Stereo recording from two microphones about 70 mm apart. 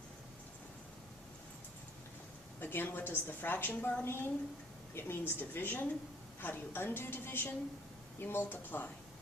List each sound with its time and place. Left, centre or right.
2.6 s a woman's voice: left